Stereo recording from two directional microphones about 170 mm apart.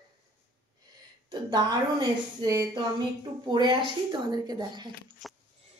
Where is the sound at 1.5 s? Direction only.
25° right (ahead or behind).